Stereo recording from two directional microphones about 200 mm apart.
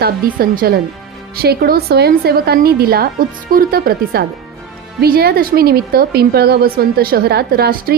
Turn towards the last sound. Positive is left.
turn(degrees=-50)  # may be behind; listen again after turning